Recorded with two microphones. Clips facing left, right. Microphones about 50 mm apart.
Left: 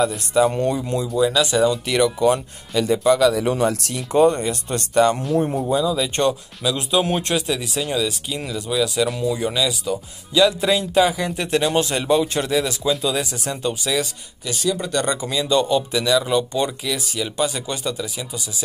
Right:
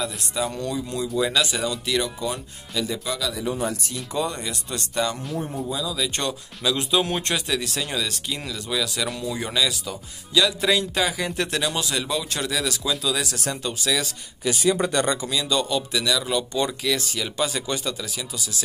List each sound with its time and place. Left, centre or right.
0.0 s speech: left
1.0 s speech: centre
1.9 s speech: left
3.3 s speech: left
6.6 s speech: centre
11.1 s speech: centre
11.4 s speech: left
11.8 s speech: left; by 14.1 s centre
14.4 s speech: centre
15.1 s speech: centre